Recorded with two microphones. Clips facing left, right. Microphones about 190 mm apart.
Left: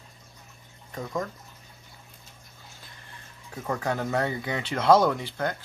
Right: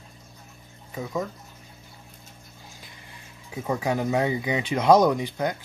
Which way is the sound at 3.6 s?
10° right (ahead or behind).